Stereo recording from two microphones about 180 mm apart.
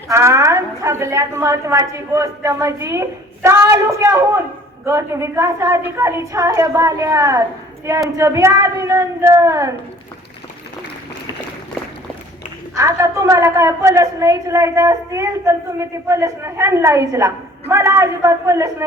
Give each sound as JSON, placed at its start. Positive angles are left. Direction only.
{"t": 0.1, "sound": "a woman's voice", "side_deg": -15}
{"t": 12.7, "sound": "a woman's voice", "side_deg": -15}